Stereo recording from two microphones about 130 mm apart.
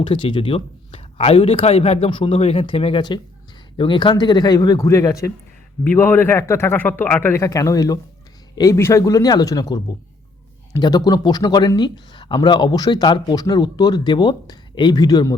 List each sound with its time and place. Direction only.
0.0 s speech: 40° left (ahead or behind); by 2.0 s 55° left (ahead or behind)
2.0 s speech: 45° left (ahead or behind); by 5.3 s 25° left (ahead or behind)
5.8 s a man's voice: 15° left (ahead or behind); by 15.4 s 30° left (ahead or behind)